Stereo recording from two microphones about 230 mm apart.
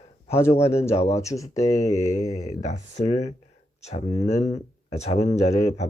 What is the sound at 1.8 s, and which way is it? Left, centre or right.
Speech, left.